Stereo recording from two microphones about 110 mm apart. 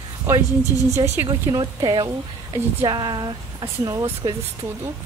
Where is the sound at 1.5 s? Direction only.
40° right (ahead or behind).